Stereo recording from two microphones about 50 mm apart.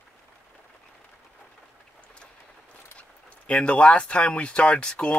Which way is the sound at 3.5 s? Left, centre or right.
Left.